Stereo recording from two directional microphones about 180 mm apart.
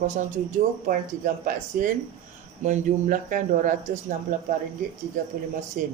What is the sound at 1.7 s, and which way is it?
Speech, 50° right (ahead or behind).